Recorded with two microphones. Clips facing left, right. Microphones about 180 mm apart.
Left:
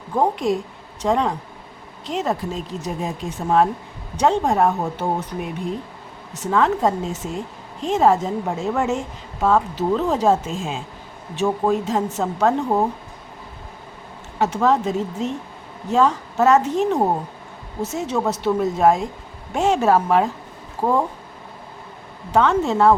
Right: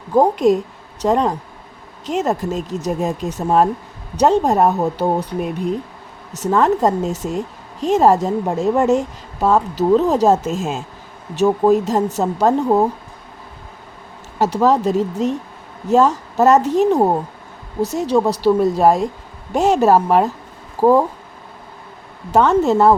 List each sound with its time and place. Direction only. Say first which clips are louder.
0.1 s a woman's voice: right 6 dB; 40° right (ahead or behind)
14.3 s a woman's voice: right 3 dB; 40° right (ahead or behind)
22.3 s a woman's voice: right 4 dB; 40° right (ahead or behind)